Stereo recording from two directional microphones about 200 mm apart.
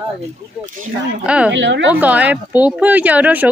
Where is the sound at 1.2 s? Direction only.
5° right (ahead or behind).